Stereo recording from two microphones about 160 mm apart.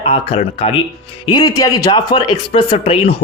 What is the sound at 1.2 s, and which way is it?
A man's voice, 25° left (ahead or behind).